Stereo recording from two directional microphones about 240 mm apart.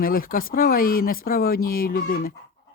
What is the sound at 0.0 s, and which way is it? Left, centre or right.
Speech, left.